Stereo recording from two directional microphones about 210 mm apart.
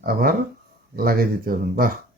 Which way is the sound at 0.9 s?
45° right (ahead or behind).